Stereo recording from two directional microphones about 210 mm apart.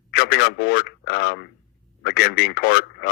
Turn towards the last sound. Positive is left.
turn(degrees=50)  # may be behind; listen again after turning